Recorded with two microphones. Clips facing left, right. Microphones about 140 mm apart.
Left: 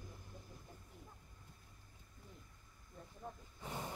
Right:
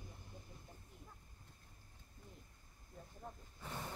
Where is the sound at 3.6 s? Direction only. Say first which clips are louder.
Left 2 dB; 15° left (ahead or behind).